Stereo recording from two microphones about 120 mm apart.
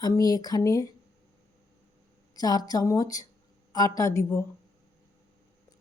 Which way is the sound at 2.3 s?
35° left (ahead or behind).